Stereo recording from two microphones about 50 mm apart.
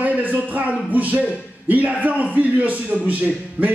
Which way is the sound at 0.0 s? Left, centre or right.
Right.